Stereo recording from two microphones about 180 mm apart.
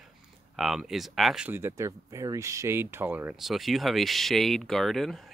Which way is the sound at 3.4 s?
Centre (ahead or behind).